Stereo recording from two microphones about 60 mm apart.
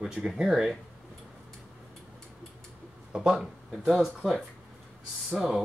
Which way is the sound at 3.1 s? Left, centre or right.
Centre.